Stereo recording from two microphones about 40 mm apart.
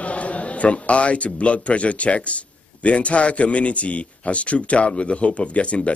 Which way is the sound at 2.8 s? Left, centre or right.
Left.